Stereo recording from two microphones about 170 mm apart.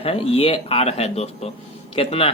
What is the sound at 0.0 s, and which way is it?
Speech, 35° left (ahead or behind).